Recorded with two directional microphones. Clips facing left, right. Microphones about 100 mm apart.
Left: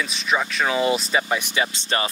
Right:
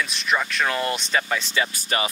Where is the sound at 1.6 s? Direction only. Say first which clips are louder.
Left 1 dB; 25° left (ahead or behind).